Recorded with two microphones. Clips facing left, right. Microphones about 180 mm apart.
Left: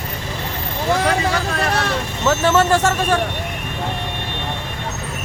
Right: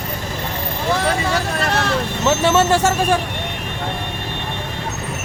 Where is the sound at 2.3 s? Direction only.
20° right (ahead or behind).